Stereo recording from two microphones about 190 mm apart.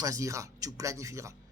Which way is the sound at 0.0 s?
15° right (ahead or behind).